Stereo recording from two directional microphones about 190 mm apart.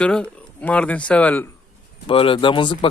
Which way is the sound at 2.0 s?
30° left (ahead or behind).